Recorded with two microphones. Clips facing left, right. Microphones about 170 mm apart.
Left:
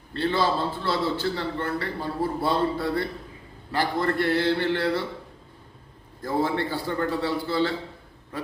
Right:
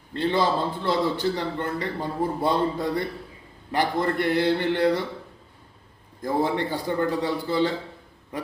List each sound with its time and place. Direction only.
0.1 s a man's voice: 15° right (ahead or behind)
6.2 s a man's voice: 15° right (ahead or behind)